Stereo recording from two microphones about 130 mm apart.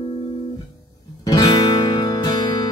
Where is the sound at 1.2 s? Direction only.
30° left (ahead or behind).